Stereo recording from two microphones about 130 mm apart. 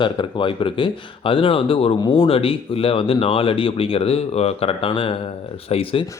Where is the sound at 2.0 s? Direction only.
30° left (ahead or behind).